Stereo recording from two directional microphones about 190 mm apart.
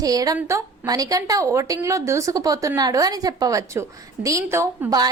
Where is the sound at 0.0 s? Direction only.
20° right (ahead or behind).